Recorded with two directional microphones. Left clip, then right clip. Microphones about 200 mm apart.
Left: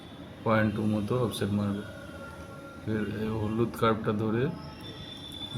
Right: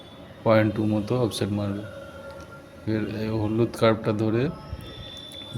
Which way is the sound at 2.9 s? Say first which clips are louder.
Right 5 dB; 35° right (ahead or behind).